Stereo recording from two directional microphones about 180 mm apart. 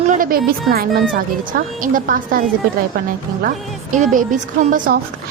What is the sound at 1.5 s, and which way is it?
Speech, 50° right (ahead or behind).